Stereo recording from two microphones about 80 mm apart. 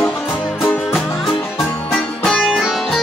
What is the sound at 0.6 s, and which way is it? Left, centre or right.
Music, left.